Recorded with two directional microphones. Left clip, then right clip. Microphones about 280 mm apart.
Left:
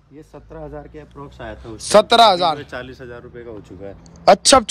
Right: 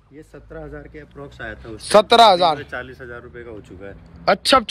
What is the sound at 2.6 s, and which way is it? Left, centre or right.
Speech, left.